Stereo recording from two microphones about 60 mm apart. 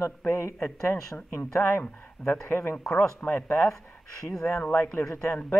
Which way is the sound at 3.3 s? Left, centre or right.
Left.